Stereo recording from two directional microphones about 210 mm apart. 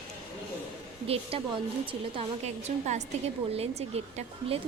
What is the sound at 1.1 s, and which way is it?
A woman's voice, 25° right (ahead or behind).